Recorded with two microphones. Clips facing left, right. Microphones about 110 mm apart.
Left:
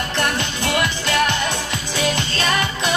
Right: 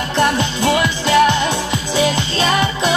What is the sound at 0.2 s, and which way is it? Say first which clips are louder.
Music: right 8 dB; 25° right (ahead or behind).